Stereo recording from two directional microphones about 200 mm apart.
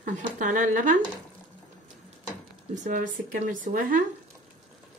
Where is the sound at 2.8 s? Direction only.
40° right (ahead or behind).